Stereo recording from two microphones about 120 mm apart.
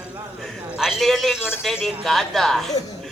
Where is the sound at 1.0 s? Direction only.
Centre (ahead or behind).